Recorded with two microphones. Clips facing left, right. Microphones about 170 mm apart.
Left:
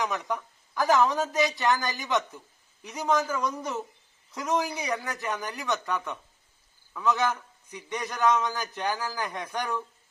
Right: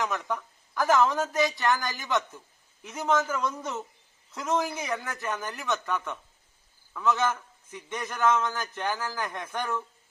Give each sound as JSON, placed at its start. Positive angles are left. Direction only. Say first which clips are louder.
{"t": 0.0, "sound": "a man's voice", "louder": "even", "side_deg": 15}
{"t": 6.9, "sound": "a man's voice", "louder": "even", "side_deg": 15}